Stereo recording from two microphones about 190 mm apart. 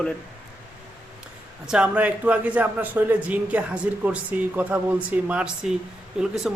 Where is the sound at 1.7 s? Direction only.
5° right (ahead or behind).